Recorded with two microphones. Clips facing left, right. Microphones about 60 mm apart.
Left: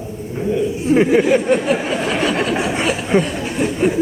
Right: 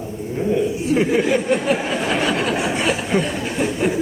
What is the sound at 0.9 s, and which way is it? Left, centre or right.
Speech, left.